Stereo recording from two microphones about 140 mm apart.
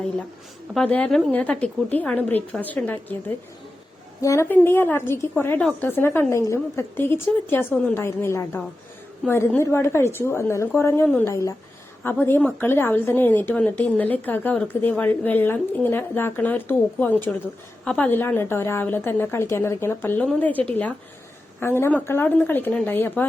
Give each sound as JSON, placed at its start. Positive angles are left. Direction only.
{"t": 0.7, "sound": "a woman's voice", "side_deg": 5}